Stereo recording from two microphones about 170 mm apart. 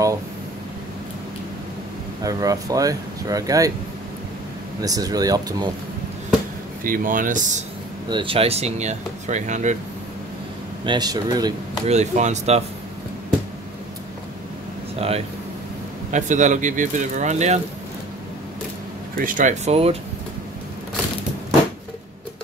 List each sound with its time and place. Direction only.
2.2 s speech: 20° right (ahead or behind)
4.8 s speech: 20° right (ahead or behind)
6.8 s speech: 55° right (ahead or behind)
8.1 s speech: 30° right (ahead or behind)
10.9 s speech: 25° right (ahead or behind)
11.9 s speech: 45° right (ahead or behind)
15.0 s speech: 35° right (ahead or behind)
19.1 s speech: 50° right (ahead or behind)